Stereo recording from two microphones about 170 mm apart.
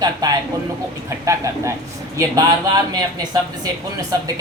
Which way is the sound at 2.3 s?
20° right (ahead or behind).